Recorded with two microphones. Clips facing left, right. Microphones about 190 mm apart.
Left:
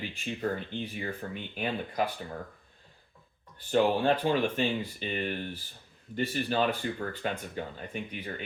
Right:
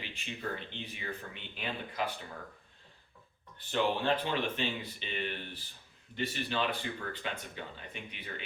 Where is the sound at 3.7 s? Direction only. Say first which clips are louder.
Left 6 dB; 45° left (ahead or behind).